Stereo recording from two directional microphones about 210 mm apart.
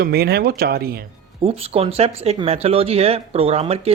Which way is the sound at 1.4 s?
30° right (ahead or behind).